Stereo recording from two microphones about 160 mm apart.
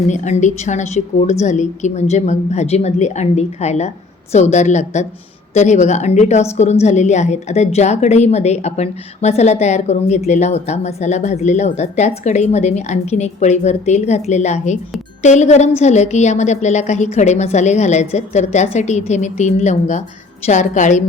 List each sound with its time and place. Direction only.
0.1 s a woman's voice: 50° left (ahead or behind)